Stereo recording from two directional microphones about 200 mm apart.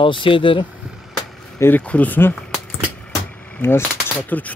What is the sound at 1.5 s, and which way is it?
Speech, 10° left (ahead or behind).